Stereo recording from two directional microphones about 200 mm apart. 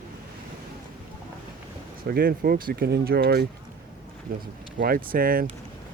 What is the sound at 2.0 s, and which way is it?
Speech, 50° right (ahead or behind).